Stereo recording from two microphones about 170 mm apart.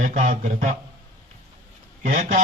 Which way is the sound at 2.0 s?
50° right (ahead or behind).